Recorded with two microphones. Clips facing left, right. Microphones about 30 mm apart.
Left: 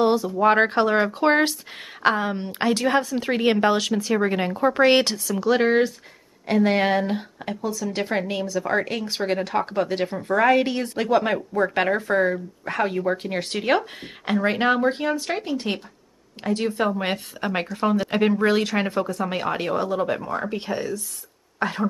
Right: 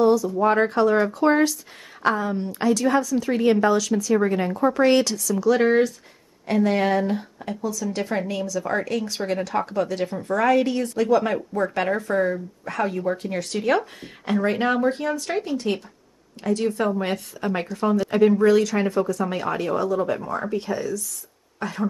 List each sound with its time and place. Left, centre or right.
0.0 s a sound: left
0.4 s speech: left
5.6 s speech: left
20.2 s speech: left
20.5 s speech: left